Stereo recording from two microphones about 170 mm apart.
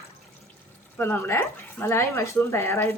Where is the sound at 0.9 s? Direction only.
10° left (ahead or behind).